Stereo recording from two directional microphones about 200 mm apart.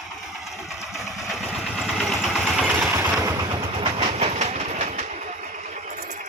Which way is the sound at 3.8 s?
30° right (ahead or behind).